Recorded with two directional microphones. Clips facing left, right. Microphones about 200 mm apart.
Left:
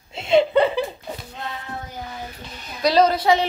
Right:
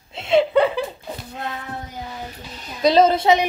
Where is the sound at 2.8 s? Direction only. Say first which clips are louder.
Right 2 dB; 25° right (ahead or behind).